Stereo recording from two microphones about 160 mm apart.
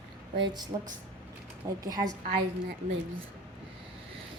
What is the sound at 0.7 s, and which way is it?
A woman's voice, 30° right (ahead or behind).